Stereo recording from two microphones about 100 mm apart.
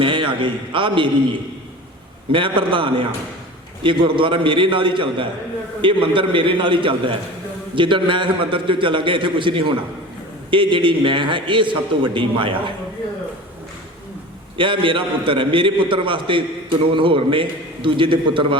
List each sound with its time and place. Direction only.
0.0 s a man's voice: 60° right (ahead or behind)
2.3 s a man's voice: 55° right (ahead or behind)
14.6 s a man's voice: 55° right (ahead or behind)